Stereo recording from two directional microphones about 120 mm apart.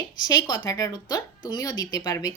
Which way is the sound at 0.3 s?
35° left (ahead or behind).